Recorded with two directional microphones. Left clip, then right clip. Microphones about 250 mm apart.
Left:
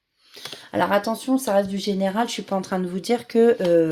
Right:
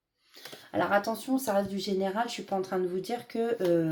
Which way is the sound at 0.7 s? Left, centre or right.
Left.